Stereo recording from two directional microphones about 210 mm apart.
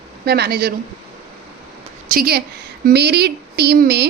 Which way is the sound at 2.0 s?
45° right (ahead or behind).